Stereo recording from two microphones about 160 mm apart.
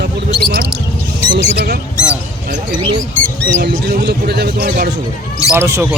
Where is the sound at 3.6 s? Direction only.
80° right; by 4.9 s 65° right (ahead or behind).